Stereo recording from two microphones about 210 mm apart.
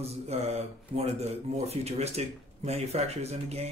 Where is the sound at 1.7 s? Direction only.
30° right (ahead or behind).